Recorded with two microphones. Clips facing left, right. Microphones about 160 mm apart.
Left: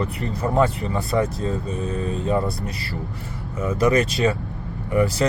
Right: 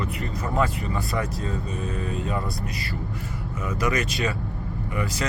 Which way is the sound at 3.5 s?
30° left (ahead or behind).